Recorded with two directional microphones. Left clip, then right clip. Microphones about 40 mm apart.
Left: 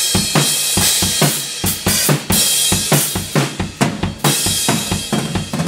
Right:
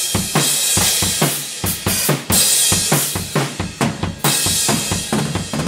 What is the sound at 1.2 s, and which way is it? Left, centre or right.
Drum kit, centre.